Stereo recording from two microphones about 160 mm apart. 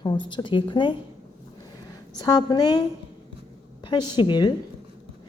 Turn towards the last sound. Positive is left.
turn(degrees=30)  # may be behind; listen again after turning